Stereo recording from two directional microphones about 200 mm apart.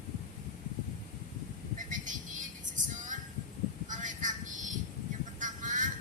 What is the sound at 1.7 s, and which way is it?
Music, 40° right (ahead or behind).